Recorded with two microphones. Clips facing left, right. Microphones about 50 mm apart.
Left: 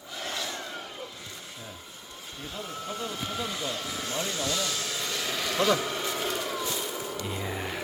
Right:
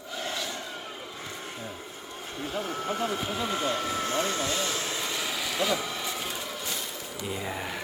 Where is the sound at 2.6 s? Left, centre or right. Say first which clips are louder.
Right 5 dB; right.